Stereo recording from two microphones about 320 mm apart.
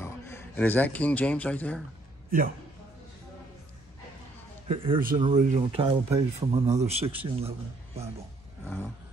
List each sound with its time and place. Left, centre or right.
0.0 s speech: centre
4.6 s speech: centre